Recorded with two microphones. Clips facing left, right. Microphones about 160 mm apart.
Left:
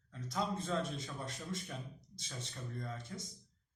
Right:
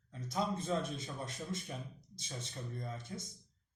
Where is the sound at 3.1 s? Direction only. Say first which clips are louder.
Right 1 dB; 20° right (ahead or behind).